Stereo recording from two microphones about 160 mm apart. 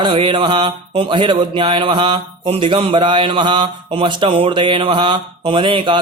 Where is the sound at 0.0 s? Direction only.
30° right (ahead or behind).